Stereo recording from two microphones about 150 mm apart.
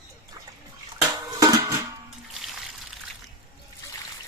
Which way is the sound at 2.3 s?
Centre (ahead or behind).